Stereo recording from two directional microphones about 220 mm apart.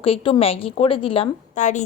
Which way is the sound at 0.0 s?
25° left (ahead or behind).